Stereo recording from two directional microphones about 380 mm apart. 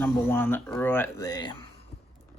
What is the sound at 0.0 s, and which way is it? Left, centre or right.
Speech, centre.